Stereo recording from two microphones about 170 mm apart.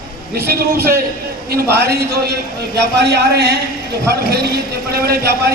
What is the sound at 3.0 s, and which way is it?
Speech, 80° right.